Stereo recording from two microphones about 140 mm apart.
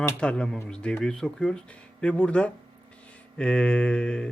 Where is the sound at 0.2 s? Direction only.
5° left (ahead or behind).